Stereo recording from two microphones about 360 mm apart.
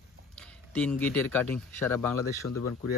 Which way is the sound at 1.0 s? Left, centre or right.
Centre.